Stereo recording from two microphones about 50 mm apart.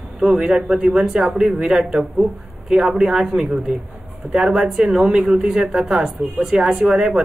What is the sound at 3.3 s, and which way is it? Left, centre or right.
A woman's voice, centre.